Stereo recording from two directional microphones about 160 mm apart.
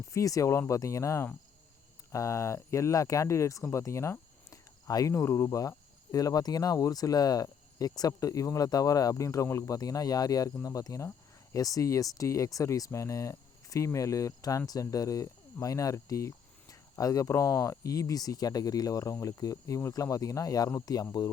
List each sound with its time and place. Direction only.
0.1 s speech: 20° left (ahead or behind)